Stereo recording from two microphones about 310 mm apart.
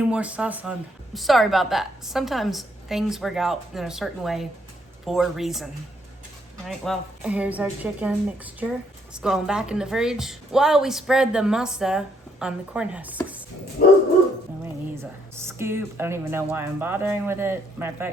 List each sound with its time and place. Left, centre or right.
0.0 s speech: centre
6.7 s speech: centre
9.1 s speech: centre
13.8 s dog: left
15.4 s speech: centre